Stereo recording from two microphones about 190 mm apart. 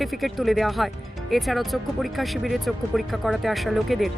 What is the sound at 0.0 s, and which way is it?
Speech, centre (ahead or behind).